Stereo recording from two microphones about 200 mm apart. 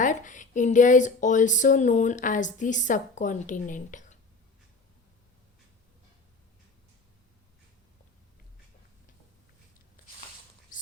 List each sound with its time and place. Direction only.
0.0 s speech: 40° left (ahead or behind)
10.7 s whispering: 40° left (ahead or behind)